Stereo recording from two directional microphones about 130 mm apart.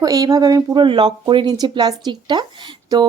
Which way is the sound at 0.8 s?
35° right (ahead or behind).